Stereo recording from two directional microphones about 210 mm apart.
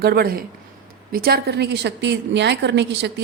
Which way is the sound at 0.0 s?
45° right (ahead or behind).